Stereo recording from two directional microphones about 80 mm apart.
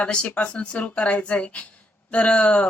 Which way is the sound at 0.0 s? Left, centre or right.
Centre.